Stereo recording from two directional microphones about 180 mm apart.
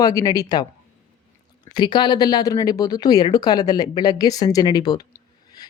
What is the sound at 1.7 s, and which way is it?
Speech, 25° left (ahead or behind).